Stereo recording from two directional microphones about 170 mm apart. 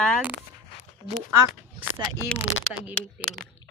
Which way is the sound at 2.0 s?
20° right (ahead or behind).